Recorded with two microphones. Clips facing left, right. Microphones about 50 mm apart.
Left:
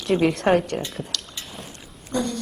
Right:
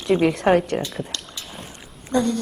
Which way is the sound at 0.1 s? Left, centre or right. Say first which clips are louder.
Right 2 dB; centre.